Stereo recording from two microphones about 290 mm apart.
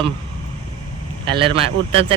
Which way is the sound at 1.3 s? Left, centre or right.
Centre.